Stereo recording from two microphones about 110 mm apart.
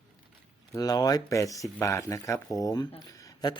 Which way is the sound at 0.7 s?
35° left (ahead or behind).